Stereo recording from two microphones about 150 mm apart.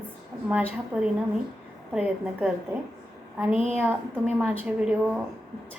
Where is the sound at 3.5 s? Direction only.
40° left (ahead or behind).